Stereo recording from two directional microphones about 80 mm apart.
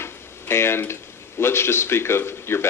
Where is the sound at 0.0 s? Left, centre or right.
Left.